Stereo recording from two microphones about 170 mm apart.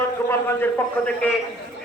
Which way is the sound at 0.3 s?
15° left (ahead or behind).